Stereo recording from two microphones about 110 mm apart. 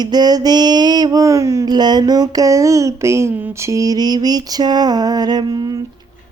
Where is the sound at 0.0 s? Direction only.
40° right (ahead or behind).